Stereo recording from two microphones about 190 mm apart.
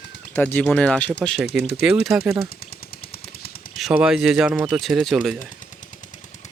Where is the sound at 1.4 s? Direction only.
60° left (ahead or behind).